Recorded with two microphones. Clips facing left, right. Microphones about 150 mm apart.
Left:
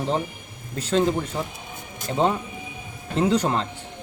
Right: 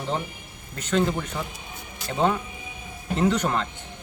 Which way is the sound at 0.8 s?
30° left (ahead or behind).